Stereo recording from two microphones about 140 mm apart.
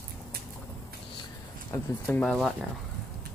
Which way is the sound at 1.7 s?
15° left (ahead or behind).